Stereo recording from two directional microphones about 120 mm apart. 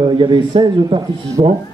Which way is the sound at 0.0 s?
40° right (ahead or behind).